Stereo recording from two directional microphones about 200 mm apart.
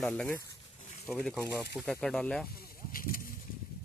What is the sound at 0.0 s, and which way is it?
Speech, 5° left (ahead or behind).